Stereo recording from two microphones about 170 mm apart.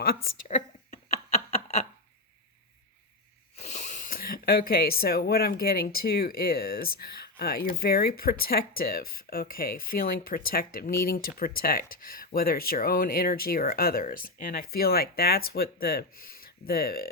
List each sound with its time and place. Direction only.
0.0 s speech: 60° left (ahead or behind)
0.4 s a sound: 45° left (ahead or behind)
3.6 s speech: 45° left (ahead or behind); by 17.1 s 65° left (ahead or behind)